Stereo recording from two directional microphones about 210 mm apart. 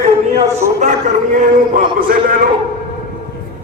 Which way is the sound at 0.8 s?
35° right (ahead or behind).